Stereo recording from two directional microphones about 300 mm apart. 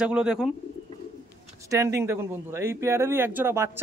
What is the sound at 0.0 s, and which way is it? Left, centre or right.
Speech, centre.